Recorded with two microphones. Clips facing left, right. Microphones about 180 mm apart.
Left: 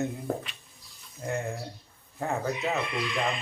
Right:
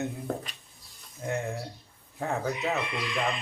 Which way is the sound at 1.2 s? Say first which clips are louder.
Even; centre (ahead or behind).